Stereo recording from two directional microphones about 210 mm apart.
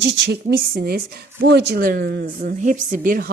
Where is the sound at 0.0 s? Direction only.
50° right (ahead or behind).